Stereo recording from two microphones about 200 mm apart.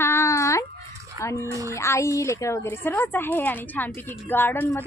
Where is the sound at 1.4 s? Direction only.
15° right (ahead or behind).